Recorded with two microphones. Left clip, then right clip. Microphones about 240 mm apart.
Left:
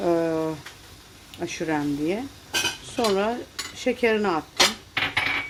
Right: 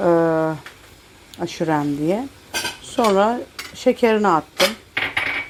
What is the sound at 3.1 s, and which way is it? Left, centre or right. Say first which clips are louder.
Cutlery: right 7 dB; centre.